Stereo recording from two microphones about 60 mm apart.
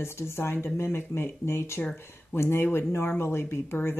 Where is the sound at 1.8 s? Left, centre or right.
Left.